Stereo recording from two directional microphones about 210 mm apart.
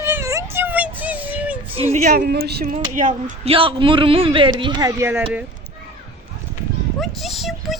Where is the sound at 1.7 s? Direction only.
30° right (ahead or behind); by 5.4 s 5° right (ahead or behind).